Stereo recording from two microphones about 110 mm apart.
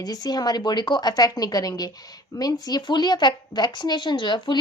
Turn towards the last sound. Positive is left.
turn(degrees=45)  # may be behind; listen again after turning